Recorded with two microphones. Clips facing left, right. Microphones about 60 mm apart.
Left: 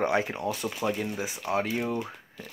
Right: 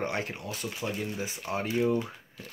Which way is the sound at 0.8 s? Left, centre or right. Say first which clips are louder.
Left 4 dB; left.